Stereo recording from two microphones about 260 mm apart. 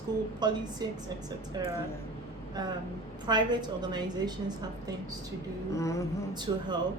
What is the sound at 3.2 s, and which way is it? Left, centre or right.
A woman's voice, centre.